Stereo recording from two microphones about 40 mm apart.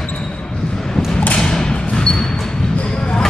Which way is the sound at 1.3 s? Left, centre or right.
Centre.